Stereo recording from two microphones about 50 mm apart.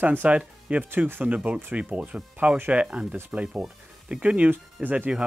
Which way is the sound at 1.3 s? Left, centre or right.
Right.